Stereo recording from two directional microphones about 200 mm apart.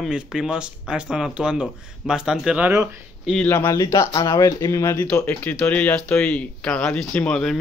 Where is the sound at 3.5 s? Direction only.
15° left (ahead or behind).